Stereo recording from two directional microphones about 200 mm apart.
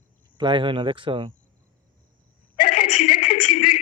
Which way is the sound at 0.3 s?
25° right (ahead or behind).